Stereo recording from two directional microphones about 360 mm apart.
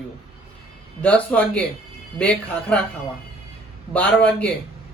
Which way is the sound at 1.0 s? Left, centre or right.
Centre.